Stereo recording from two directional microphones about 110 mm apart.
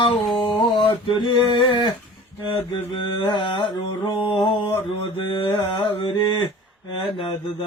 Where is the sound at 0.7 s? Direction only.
50° left (ahead or behind).